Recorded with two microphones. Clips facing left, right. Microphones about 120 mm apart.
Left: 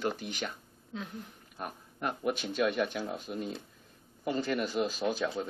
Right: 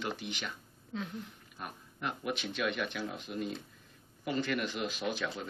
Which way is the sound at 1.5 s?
40° left (ahead or behind).